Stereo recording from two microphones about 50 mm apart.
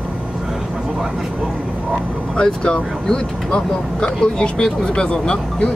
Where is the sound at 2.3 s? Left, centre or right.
Left.